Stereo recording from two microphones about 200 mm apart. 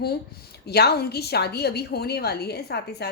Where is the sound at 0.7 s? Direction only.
55° left (ahead or behind).